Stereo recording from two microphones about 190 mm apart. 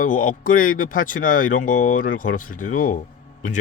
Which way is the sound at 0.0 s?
45° left (ahead or behind).